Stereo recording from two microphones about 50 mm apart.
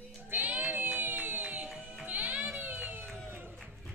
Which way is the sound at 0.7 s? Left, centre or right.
Right.